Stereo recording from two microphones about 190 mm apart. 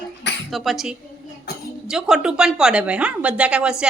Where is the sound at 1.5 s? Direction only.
55° left (ahead or behind).